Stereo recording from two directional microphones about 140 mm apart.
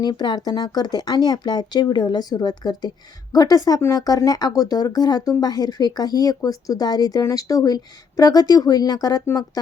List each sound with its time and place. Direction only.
0.0 s speech: 30° left (ahead or behind)